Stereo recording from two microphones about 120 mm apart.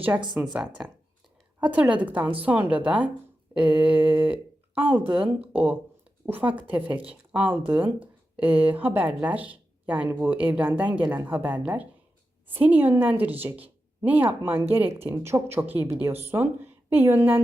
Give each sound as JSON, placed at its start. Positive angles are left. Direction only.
{"t": 0.5, "sound": "speech", "side_deg": -10}